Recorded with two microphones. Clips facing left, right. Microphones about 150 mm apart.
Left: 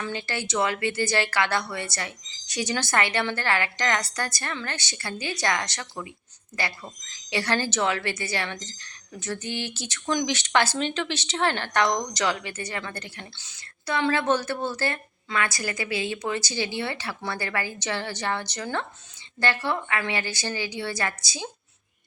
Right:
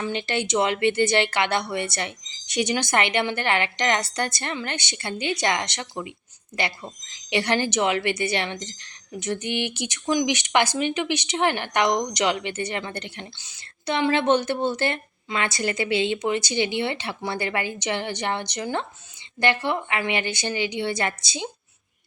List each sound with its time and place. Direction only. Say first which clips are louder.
0.0 s a woman's voice: right 5 dB; 20° right (ahead or behind)